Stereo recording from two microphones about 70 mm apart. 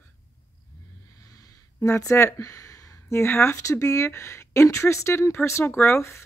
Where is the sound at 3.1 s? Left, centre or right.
Left.